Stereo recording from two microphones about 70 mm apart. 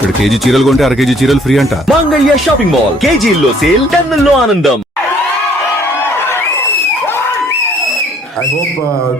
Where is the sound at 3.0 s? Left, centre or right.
Centre.